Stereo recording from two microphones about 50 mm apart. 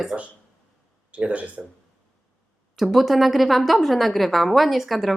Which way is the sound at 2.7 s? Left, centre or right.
Centre.